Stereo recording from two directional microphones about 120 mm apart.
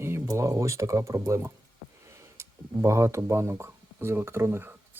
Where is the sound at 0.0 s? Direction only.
20° right (ahead or behind).